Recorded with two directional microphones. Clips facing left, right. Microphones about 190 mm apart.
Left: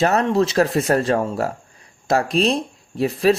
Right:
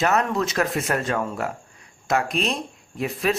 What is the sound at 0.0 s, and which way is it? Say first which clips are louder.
Speech: left 5 dB; 30° left (ahead or behind).